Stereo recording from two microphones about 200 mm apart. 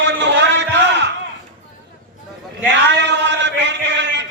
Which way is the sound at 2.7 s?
60° right (ahead or behind).